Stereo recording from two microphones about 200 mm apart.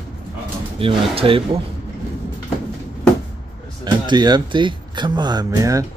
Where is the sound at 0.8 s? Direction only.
25° right (ahead or behind).